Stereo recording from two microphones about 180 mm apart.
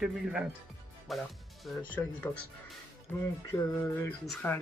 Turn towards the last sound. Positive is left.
turn(degrees=10)  # may be behind; listen again after turning